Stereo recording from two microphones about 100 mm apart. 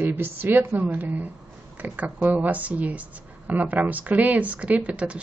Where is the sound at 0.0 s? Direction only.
20° right (ahead or behind).